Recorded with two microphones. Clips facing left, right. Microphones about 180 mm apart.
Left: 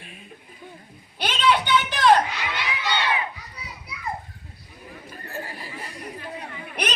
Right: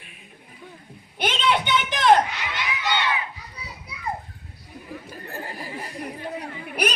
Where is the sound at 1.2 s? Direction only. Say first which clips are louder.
Left 1 dB; 20° right (ahead or behind).